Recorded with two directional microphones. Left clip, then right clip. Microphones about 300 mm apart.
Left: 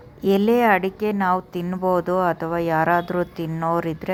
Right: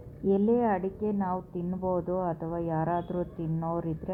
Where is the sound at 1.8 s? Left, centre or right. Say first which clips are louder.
Left 10 dB; left.